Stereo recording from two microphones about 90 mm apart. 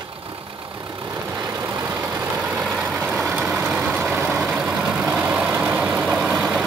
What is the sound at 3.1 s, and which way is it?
Vehicle, 15° right (ahead or behind).